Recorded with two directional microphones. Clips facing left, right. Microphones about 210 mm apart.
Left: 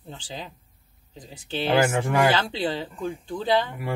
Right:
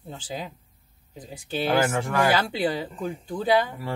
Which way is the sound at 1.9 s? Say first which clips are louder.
Left 2 dB; 20° left (ahead or behind).